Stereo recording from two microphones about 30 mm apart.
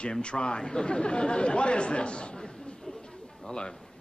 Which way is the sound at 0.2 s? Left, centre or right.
Left.